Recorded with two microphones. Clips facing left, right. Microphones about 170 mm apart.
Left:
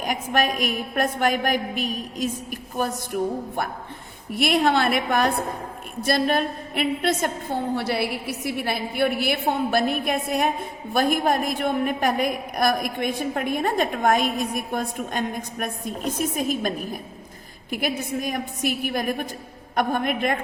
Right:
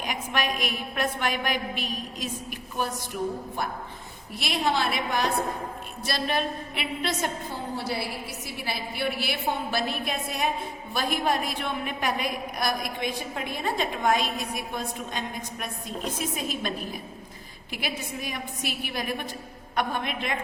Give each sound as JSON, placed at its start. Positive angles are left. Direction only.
{"t": 0.0, "sound": "a woman's voice", "side_deg": 45}